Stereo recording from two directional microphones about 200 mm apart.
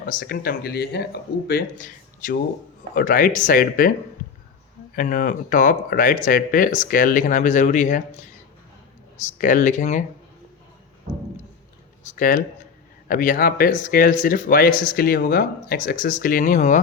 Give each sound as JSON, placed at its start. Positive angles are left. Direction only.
{"t": 0.0, "sound": "speech", "side_deg": 45}
{"t": 4.9, "sound": "speech", "side_deg": 40}
{"t": 9.1, "sound": "speech", "side_deg": 40}
{"t": 12.0, "sound": "speech", "side_deg": 40}